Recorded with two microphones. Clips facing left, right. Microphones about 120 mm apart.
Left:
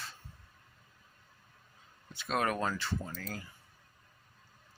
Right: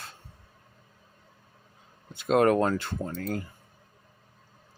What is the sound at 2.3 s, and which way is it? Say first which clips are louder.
Speech: right 10 dB; 55° right (ahead or behind).